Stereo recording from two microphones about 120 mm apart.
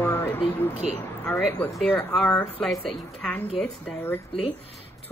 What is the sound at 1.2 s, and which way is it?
Speech, 10° left (ahead or behind).